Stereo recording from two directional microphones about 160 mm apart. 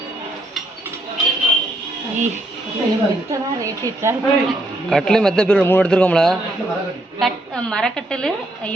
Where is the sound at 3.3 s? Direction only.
20° right (ahead or behind).